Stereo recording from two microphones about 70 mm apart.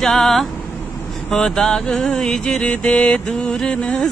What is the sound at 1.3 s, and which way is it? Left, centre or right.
Mantra, centre.